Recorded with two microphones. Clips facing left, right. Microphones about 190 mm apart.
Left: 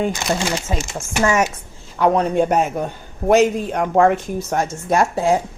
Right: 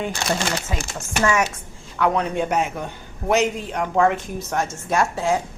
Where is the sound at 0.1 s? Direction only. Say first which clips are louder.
Left 3 dB; 20° left (ahead or behind).